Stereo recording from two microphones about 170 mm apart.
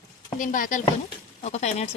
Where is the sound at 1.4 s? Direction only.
40° left (ahead or behind).